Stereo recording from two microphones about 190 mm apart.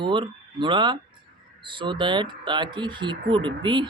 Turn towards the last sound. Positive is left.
turn(degrees=-25)  # may be behind; listen again after turning